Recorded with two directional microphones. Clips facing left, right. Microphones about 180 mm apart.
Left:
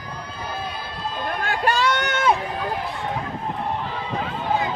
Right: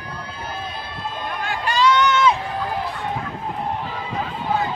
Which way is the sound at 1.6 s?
55° left (ahead or behind).